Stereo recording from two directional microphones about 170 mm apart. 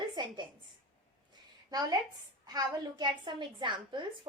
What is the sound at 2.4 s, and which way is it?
A woman's voice, 25° right (ahead or behind).